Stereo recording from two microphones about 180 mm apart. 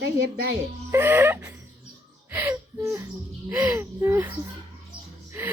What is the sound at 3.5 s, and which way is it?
Speech, 5° right (ahead or behind).